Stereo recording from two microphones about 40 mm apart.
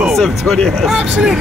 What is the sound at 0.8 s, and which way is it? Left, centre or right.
Speech, centre.